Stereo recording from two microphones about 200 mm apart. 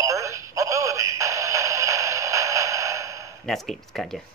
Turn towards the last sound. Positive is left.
turn(degrees=0)  # may be behind; listen again after turning